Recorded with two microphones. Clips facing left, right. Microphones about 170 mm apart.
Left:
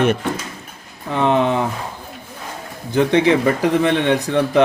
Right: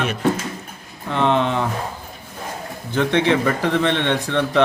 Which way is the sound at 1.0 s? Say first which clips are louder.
Left 2 dB; 10° left (ahead or behind).